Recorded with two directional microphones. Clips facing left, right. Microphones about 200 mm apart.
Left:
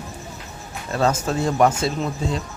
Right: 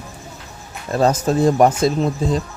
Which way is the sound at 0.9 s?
35° right (ahead or behind).